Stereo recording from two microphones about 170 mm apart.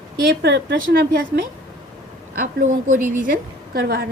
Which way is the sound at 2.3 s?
50° right (ahead or behind).